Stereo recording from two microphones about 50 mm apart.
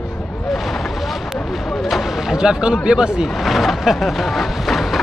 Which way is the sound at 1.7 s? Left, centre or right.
Centre.